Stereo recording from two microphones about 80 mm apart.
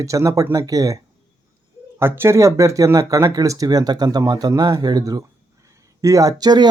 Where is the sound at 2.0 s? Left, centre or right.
Right.